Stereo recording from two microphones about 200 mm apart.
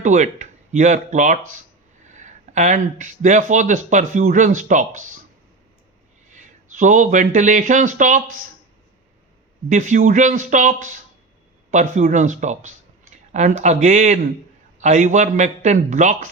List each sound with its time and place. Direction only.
0.0 s speech: 35° right (ahead or behind)
6.3 s speech: 40° right (ahead or behind)
9.6 s speech: 40° right (ahead or behind)